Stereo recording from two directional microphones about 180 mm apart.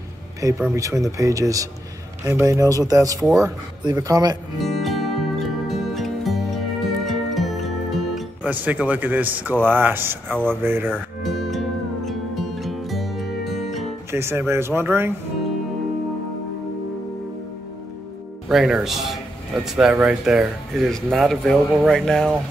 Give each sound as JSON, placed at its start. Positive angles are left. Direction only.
{"t": 0.4, "sound": "speech", "side_deg": -20}
{"t": 4.6, "sound": "music", "side_deg": 0}
{"t": 9.7, "sound": "speech", "side_deg": -10}
{"t": 10.9, "sound": "music", "side_deg": 0}
{"t": 14.1, "sound": "speech", "side_deg": -15}
{"t": 18.5, "sound": "speech", "side_deg": 0}